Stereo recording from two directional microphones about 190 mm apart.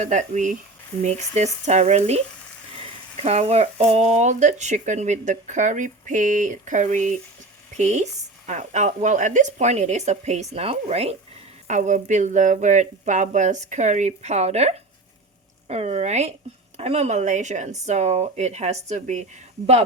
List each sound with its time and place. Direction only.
0.0 s speech: 40° right (ahead or behind)
3.2 s speech: 35° right (ahead or behind)